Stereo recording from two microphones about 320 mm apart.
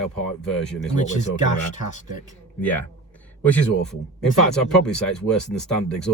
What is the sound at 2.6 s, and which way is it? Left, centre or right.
Speech, centre.